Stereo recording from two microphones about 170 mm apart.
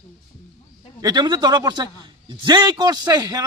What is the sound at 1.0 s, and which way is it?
A man's voice, 25° right (ahead or behind).